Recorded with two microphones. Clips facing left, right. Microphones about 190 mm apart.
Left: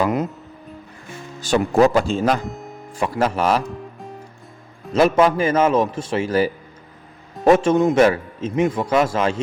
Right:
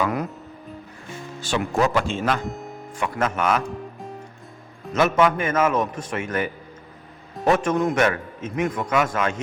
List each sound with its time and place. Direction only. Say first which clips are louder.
0.0 s speech: left 4 dB; 20° left (ahead or behind)
1.4 s speech: left 7 dB; 40° left (ahead or behind)
2.4 s music: even; centre (ahead or behind)
3.0 s speech: left 4 dB; 35° left (ahead or behind)
3.6 s music: even; centre (ahead or behind)
4.9 s speech: left 4 dB; 30° left (ahead or behind)